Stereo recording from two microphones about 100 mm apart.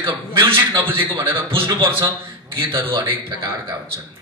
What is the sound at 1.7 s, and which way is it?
Speech, 45° right (ahead or behind).